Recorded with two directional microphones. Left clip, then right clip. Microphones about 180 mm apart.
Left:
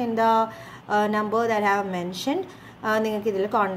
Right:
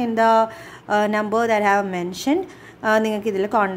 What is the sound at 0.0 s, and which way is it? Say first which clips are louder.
A woman's voice: right 4 dB; 25° right (ahead or behind).